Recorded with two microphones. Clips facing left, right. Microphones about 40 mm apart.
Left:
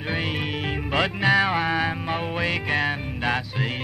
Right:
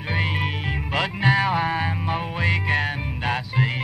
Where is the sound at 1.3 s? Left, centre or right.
Centre.